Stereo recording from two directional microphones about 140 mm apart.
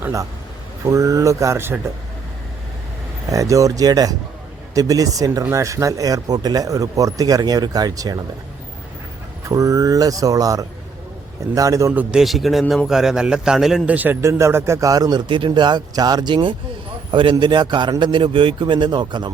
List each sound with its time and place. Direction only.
0.0 s speech: 20° right (ahead or behind)
3.2 s speech: 25° right (ahead or behind)
9.5 s speech: 25° right (ahead or behind)
12.1 s a man's voice: centre (ahead or behind); by 19.3 s 30° right (ahead or behind)